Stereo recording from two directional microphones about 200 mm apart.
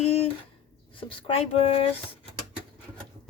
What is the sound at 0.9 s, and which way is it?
Speech, 25° left (ahead or behind).